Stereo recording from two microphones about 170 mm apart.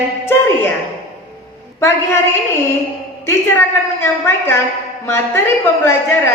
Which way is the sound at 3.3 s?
15° left (ahead or behind).